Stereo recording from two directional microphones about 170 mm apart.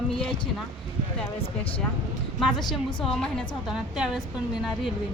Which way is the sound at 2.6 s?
Centre (ahead or behind).